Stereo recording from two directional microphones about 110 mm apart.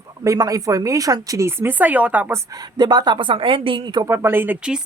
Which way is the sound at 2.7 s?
40° right (ahead or behind).